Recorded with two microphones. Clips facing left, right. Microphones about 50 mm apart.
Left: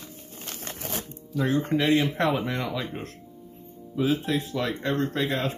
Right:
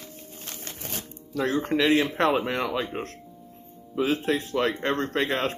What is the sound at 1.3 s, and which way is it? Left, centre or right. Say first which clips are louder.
Speech: even; right.